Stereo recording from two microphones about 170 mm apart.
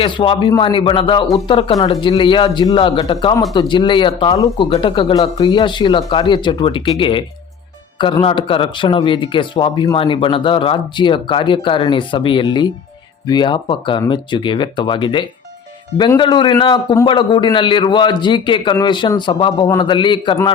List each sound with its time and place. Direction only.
0.0 s speech: 30° left (ahead or behind)